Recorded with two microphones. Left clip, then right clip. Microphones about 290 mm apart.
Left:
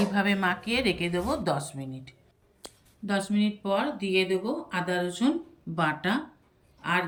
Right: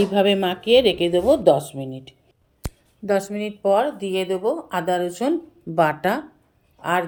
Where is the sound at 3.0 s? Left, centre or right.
Centre.